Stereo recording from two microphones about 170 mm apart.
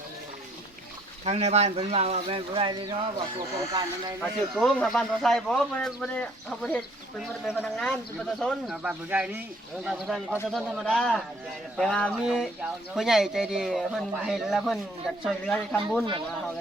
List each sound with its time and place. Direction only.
1.2 s speech: 40° right (ahead or behind)
4.2 s speech: centre (ahead or behind)